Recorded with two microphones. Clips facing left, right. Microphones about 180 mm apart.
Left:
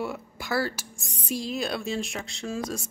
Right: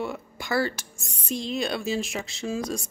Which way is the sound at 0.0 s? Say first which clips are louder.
Right 1 dB; 5° left (ahead or behind).